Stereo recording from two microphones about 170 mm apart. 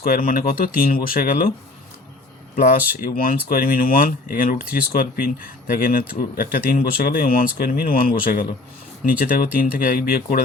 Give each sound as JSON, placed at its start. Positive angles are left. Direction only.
{"t": 0.0, "sound": "speech", "side_deg": 60}
{"t": 2.6, "sound": "speech", "side_deg": 55}